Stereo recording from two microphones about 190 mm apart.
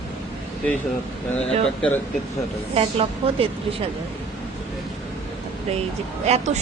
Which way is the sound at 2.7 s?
30° right (ahead or behind).